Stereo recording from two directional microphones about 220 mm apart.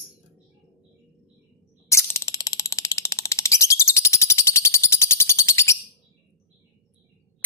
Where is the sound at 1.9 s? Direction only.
15° left (ahead or behind).